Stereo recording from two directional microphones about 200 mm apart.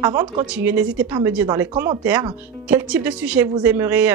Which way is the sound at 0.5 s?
5° right (ahead or behind).